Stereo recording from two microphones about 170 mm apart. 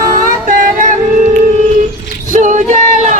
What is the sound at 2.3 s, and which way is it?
Female singing, 50° right (ahead or behind).